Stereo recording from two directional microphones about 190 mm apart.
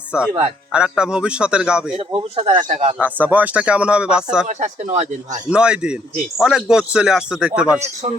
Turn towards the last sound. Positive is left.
turn(degrees=-5)  # may be behind; listen again after turning